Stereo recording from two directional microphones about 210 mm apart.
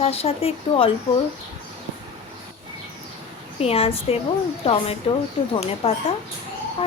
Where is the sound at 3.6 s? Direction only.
30° left (ahead or behind).